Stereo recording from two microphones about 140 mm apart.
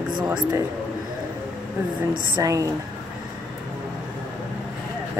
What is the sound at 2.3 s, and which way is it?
Speech, 25° right (ahead or behind).